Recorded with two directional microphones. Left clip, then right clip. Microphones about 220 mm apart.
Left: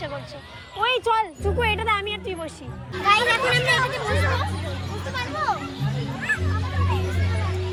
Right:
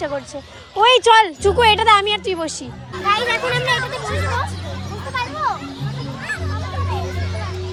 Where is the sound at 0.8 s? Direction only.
30° right (ahead or behind).